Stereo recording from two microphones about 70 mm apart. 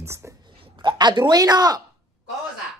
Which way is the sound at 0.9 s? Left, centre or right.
Right.